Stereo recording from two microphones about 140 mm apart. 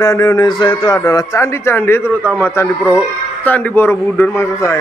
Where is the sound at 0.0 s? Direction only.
25° left (ahead or behind).